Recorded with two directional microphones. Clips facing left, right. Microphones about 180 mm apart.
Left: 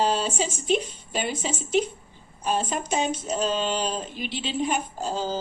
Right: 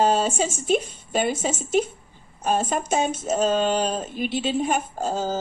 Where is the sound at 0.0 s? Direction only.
50° right (ahead or behind).